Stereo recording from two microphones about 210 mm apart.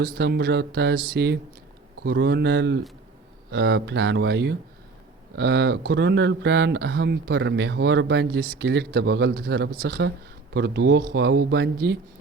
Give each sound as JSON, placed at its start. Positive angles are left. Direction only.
{"t": 0.0, "sound": "speech", "side_deg": -50}